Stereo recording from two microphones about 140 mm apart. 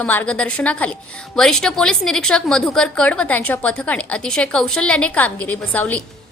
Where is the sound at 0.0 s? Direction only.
10° left (ahead or behind).